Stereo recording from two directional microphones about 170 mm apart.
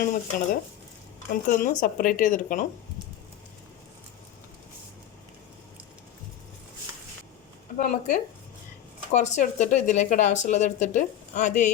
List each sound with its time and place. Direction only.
0.0 s speech: 55° left (ahead or behind)
1.5 s speech: 55° left (ahead or behind)
7.8 s speech: 45° left (ahead or behind)